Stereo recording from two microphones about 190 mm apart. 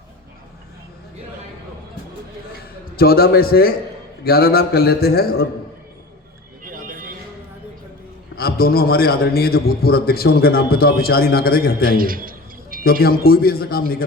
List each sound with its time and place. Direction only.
2.9 s a man's voice: 55° left (ahead or behind)
6.7 s music: 45° right (ahead or behind)
8.4 s a man's voice: 50° left (ahead or behind)
11.9 s a man's voice: 50° right (ahead or behind)
12.8 s a man's voice: 50° left (ahead or behind)